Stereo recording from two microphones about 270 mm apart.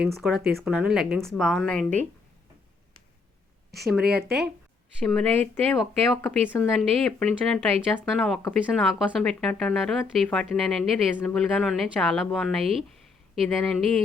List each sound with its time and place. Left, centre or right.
0.0 s speech: centre
3.8 s speech: centre